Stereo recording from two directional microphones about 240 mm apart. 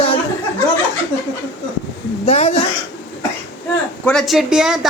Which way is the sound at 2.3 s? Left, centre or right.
Left.